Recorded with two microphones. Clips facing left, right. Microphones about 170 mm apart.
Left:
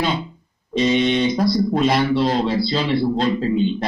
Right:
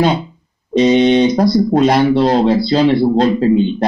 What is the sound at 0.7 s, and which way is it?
A man's voice, 45° right (ahead or behind).